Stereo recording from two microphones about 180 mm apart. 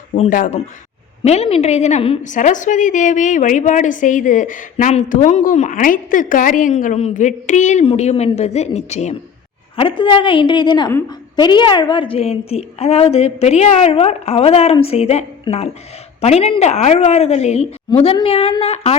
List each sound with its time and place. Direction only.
0.2 s a woman's voice: 50° left (ahead or behind)
1.2 s a woman's voice: 35° left (ahead or behind)